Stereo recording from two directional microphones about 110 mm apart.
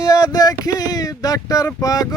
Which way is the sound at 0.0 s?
35° left (ahead or behind).